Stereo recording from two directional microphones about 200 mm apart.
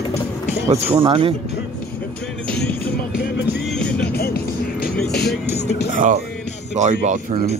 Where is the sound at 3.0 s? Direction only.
50° left (ahead or behind).